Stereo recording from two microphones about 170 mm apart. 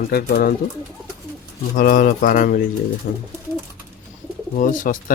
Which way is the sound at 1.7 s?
55° left (ahead or behind).